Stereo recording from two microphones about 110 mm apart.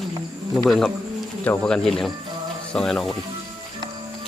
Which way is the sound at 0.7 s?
5° left (ahead or behind).